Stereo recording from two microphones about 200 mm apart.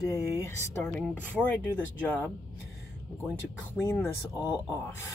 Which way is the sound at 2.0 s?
10° left (ahead or behind).